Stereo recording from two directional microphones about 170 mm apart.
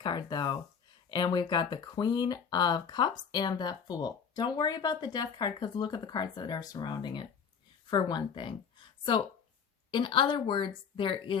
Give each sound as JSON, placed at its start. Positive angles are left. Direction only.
{"t": 0.0, "sound": "speech", "side_deg": 25}